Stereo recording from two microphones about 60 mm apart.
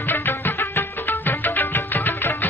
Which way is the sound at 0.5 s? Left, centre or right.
Left.